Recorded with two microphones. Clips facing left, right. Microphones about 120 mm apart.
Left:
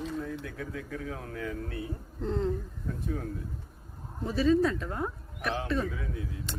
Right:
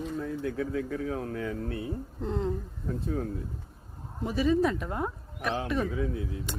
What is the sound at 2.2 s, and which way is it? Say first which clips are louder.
Speech: left 1 dB; 15° right (ahead or behind).